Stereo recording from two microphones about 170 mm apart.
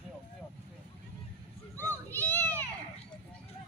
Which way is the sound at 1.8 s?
10° left (ahead or behind).